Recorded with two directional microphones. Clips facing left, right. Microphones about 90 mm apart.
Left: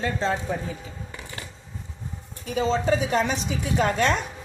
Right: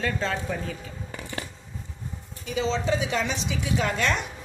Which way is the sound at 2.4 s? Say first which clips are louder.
Left 3 dB; 45° left (ahead or behind).